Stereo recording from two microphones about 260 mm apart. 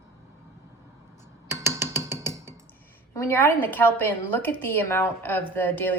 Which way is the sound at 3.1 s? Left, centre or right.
Centre.